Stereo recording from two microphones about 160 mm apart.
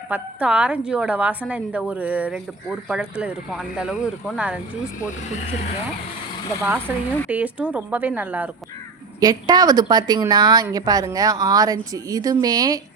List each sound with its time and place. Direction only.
0.1 s a woman's voice: 5° right (ahead or behind)
6.6 s a woman's voice: 15° right (ahead or behind)
9.2 s a woman's voice: 25° right (ahead or behind)